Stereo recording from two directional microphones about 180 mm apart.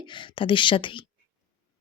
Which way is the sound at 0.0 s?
25° left (ahead or behind).